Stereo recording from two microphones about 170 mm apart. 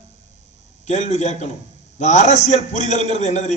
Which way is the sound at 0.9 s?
40° left (ahead or behind).